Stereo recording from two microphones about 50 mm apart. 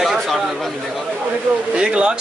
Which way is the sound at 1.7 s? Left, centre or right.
Right.